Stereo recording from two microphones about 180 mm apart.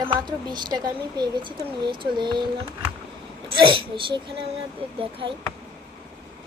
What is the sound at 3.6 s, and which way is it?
Speech, 30° right (ahead or behind).